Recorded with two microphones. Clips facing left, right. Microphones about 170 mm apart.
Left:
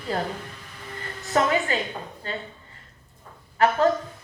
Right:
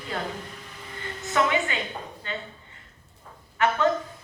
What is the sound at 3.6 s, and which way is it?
Speech, 35° left (ahead or behind).